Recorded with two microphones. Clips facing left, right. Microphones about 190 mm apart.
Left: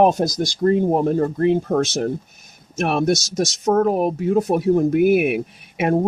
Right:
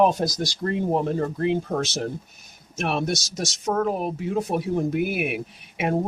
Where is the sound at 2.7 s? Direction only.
50° left (ahead or behind).